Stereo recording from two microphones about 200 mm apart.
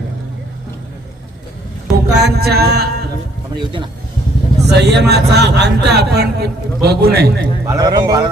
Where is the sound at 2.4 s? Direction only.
50° right (ahead or behind).